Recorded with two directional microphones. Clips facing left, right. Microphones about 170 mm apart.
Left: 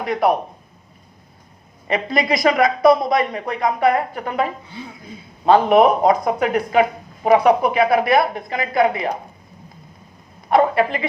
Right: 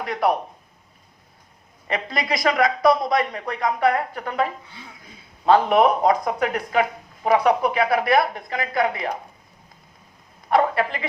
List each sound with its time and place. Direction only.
0.0 s speech: 20° left (ahead or behind)
1.9 s speech: 20° left (ahead or behind)
5.5 s speech: 20° left (ahead or behind)
10.5 s a sound: 20° left (ahead or behind)